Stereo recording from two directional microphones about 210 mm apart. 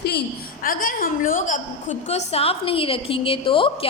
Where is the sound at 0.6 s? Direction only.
40° left (ahead or behind).